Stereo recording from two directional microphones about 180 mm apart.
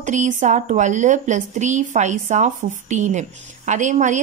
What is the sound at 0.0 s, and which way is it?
A woman's voice, 40° right (ahead or behind).